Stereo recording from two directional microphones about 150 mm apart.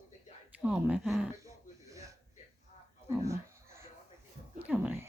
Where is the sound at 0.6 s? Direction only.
10° right (ahead or behind).